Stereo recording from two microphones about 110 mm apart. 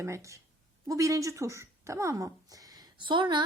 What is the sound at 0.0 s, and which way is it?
A woman's voice, 25° right (ahead or behind).